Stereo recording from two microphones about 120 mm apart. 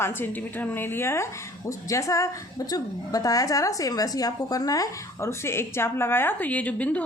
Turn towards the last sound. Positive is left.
turn(degrees=10)  # may be behind; listen again after turning